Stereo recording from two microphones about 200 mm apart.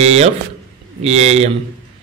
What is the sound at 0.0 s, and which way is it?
Speech, 35° right (ahead or behind).